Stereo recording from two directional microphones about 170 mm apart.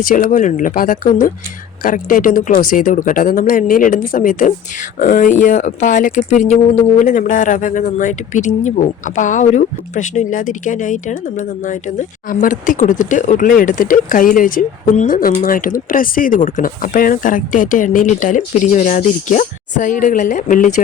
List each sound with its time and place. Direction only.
0.0 s speech: 55° left (ahead or behind)